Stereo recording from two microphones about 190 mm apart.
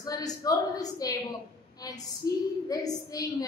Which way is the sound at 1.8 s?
20° left (ahead or behind).